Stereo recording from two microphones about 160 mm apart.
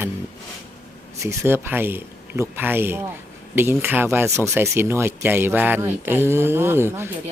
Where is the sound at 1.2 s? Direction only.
20° right (ahead or behind).